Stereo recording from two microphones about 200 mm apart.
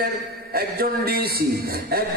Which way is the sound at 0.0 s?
50° right (ahead or behind).